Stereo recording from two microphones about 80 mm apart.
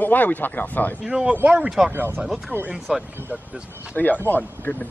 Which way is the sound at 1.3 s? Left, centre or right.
Right.